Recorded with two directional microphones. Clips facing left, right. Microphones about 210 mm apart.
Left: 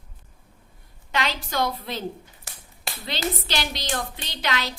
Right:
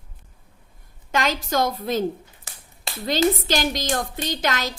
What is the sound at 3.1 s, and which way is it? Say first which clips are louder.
A woman's voice: right 9 dB; 45° right (ahead or behind).